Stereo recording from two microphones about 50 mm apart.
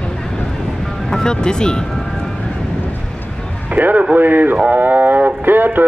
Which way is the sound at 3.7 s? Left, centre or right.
Right.